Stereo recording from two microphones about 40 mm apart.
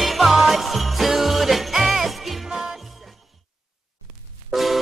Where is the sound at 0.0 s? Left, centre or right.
Centre.